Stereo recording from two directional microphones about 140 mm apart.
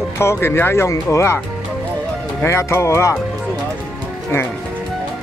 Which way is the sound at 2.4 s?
20° left (ahead or behind).